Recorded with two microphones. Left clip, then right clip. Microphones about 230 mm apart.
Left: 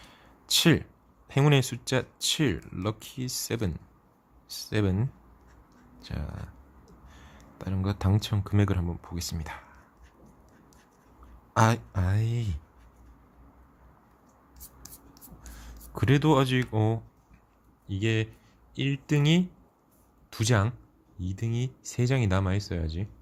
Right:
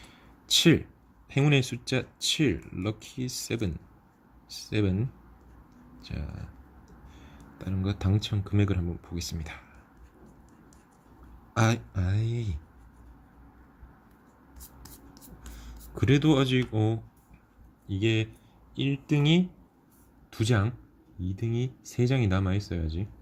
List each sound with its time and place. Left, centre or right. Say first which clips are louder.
0.1 s a sound: right 1 dB; centre
1.3 s speech: left 1 dB; centre
11.5 s speech: left 4 dB; centre
15.5 s speech: left 2 dB; centre